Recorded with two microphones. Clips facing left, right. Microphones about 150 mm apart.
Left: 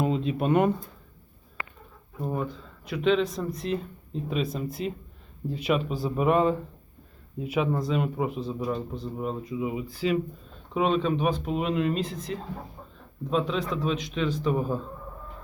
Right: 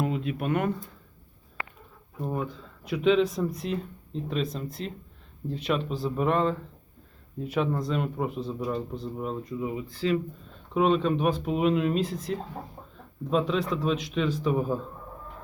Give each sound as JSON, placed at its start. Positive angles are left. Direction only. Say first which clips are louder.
{"t": 0.0, "sound": "speech", "louder": "left 3 dB", "side_deg": 25}
{"t": 2.2, "sound": "speech", "louder": "left 1 dB", "side_deg": 0}
{"t": 10.8, "sound": "speech", "louder": "right 1 dB", "side_deg": 0}